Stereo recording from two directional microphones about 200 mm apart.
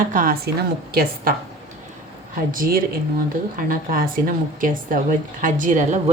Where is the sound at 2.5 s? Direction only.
45° right (ahead or behind).